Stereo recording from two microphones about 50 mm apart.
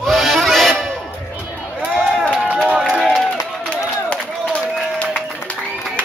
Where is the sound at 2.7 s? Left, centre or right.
Centre.